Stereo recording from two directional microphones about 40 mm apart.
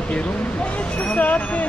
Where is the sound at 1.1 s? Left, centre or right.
Left.